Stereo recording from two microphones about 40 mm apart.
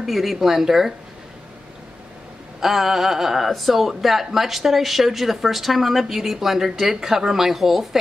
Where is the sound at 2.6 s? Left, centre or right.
Centre.